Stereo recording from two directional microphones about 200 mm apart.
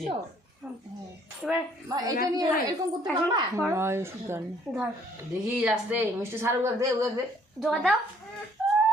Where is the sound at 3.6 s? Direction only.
10° right (ahead or behind).